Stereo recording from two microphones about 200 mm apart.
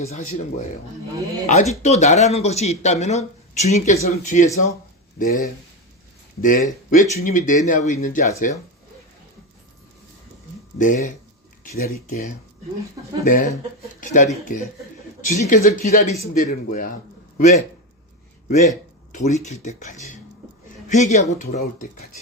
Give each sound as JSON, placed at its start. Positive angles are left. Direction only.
{"t": 0.0, "sound": "a man's voice", "side_deg": 35}
{"t": 10.8, "sound": "a man's voice", "side_deg": 40}
{"t": 13.2, "sound": "a man's voice", "side_deg": 40}
{"t": 21.6, "sound": "speech", "side_deg": 50}